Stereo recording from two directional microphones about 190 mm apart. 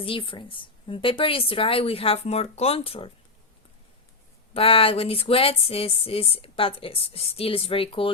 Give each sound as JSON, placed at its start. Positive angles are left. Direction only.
{"t": 0.0, "sound": "speech", "side_deg": 30}
{"t": 4.5, "sound": "speech", "side_deg": 30}